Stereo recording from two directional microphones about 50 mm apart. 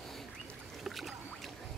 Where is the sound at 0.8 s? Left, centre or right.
Centre.